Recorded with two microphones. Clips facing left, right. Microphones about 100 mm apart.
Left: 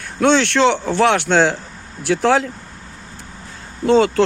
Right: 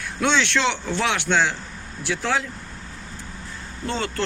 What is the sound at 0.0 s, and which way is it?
A man's voice, 50° left (ahead or behind).